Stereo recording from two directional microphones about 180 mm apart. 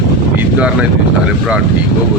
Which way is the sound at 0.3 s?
5° right (ahead or behind).